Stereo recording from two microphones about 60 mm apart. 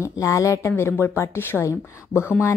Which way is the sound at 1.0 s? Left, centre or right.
Left.